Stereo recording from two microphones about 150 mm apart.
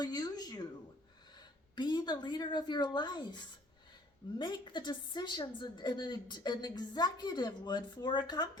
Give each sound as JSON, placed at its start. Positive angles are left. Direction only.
{"t": 0.0, "sound": "a woman's voice", "side_deg": 25}
{"t": 1.7, "sound": "a woman's voice", "side_deg": 30}